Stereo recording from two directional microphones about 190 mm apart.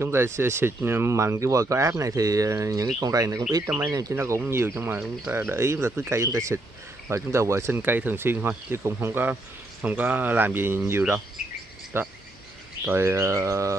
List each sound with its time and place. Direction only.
0.0 s speech: 15° right (ahead or behind)